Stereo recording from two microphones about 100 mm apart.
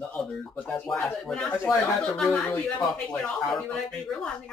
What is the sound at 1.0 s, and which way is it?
Speech, 5° left (ahead or behind).